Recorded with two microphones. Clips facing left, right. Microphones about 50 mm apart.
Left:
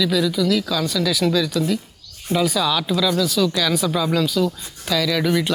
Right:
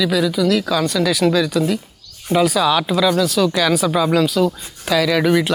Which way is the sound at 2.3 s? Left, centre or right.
Right.